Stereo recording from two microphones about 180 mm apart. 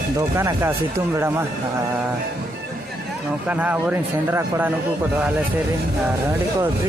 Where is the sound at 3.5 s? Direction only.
5° right (ahead or behind).